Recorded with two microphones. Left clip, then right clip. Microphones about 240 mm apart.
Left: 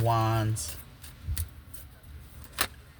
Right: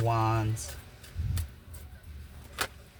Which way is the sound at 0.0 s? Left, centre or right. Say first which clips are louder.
Left 1 dB; centre.